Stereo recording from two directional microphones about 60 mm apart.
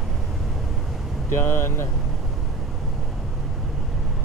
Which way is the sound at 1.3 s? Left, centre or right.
Left.